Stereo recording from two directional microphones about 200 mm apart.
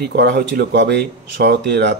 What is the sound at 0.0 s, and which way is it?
Speech, 55° right (ahead or behind).